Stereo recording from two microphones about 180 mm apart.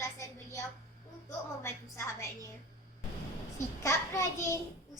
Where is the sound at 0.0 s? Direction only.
15° left (ahead or behind).